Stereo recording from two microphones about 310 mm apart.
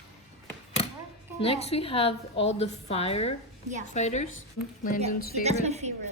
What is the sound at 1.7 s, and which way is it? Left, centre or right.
A woman's voice, centre.